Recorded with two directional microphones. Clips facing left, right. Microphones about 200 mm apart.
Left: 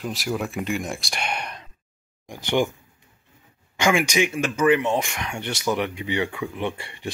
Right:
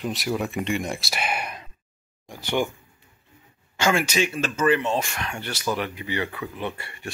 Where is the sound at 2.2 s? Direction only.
15° left (ahead or behind).